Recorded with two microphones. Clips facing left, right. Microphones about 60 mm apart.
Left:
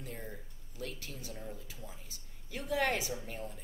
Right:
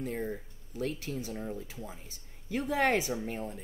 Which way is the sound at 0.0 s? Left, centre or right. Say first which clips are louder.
Right 10 dB; right.